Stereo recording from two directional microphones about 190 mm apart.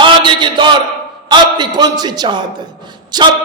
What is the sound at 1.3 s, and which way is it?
A man's voice, 20° right (ahead or behind).